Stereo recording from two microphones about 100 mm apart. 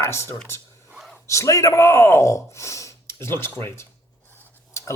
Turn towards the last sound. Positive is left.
turn(degrees=30)  # may be behind; listen again after turning